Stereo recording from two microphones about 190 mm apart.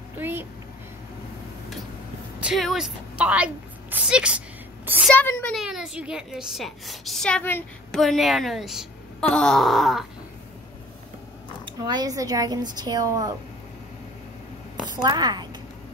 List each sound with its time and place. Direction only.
0.2 s a sound: 10° right (ahead or behind)
2.4 s a woman's voice: centre (ahead or behind)
5.1 s a woman's voice: 10° left (ahead or behind)
11.8 s a woman's voice: 20° right (ahead or behind)
14.9 s a woman's voice: 20° right (ahead or behind)